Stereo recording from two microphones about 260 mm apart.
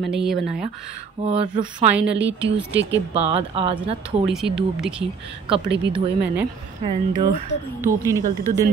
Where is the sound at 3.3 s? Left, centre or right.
Right.